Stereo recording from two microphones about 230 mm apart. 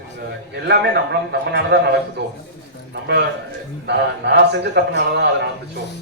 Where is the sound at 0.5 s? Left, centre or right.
Right.